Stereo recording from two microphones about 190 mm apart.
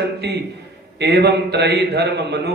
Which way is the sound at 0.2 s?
60° right (ahead or behind).